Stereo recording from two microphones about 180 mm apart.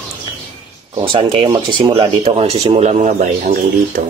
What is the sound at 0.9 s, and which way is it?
Speech, 30° right (ahead or behind).